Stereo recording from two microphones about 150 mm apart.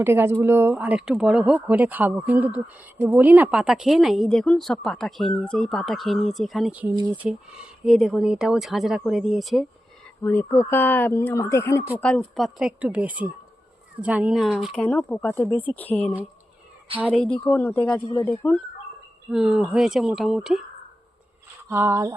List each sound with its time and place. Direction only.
0.0 s a woman's voice: 15° right (ahead or behind)
10.2 s speech: 20° left (ahead or behind)
12.3 s speech: centre (ahead or behind)
14.7 s speech: 10° left (ahead or behind)
15.4 s speech: 10° right (ahead or behind)
15.7 s speech: 10° left (ahead or behind)
17.2 s a woman's voice: 5° left (ahead or behind)
21.7 s speech: 15° right (ahead or behind)